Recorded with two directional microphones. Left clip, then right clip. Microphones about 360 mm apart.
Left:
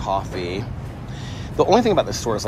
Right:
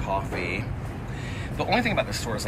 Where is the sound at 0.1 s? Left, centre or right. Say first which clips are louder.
Left 4 dB; centre.